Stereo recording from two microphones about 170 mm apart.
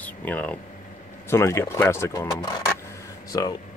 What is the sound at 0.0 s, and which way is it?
Speech, 10° left (ahead or behind).